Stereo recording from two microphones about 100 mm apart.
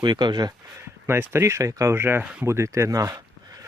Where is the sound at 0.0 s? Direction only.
45° right (ahead or behind).